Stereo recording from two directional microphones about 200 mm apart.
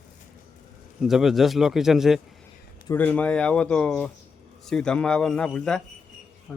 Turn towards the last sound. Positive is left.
turn(degrees=5)  # may be behind; listen again after turning